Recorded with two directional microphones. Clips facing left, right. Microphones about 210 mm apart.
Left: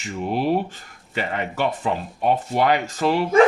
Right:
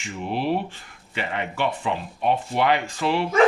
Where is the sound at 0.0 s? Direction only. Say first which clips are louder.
Left 3 dB; 40° left (ahead or behind).